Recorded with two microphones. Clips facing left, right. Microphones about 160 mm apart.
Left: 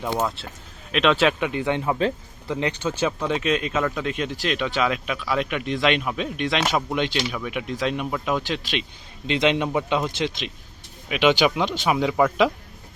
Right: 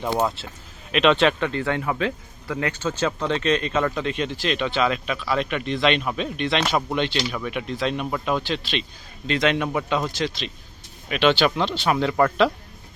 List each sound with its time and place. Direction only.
0.9 s speech: centre (ahead or behind)